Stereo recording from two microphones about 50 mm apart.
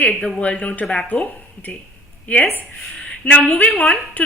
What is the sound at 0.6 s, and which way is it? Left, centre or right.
A woman's voice, left.